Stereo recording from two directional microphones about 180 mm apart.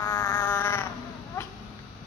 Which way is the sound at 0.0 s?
20° left (ahead or behind).